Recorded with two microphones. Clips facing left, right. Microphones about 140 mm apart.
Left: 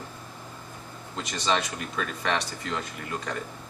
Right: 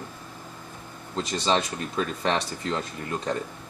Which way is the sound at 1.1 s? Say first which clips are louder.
Right 3 dB; 30° right (ahead or behind).